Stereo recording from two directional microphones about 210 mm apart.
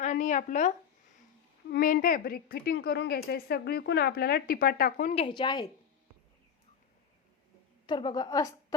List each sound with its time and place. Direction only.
0.0 s a sound: 35° left (ahead or behind)
1.7 s a woman's voice: 40° left (ahead or behind)
5.1 s a woman's voice: 25° left (ahead or behind)
7.9 s a woman's voice: 20° left (ahead or behind)